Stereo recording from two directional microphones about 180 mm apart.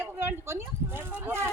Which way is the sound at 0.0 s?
10° right (ahead or behind).